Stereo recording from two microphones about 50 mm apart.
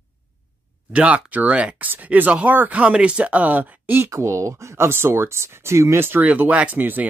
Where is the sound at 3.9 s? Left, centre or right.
Right.